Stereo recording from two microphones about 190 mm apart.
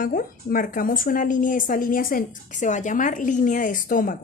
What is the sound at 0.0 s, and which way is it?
Speech, 45° left (ahead or behind).